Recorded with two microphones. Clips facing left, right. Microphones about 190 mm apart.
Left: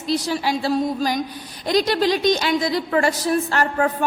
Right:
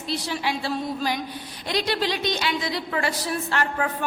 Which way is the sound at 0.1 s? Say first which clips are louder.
Left 6 dB; 40° left (ahead or behind).